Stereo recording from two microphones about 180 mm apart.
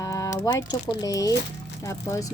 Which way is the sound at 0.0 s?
20° left (ahead or behind).